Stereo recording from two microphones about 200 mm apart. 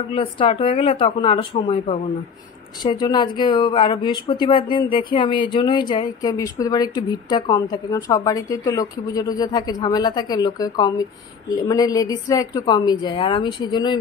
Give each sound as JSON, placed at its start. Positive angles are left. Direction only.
{"t": 0.1, "sound": "speech", "side_deg": 25}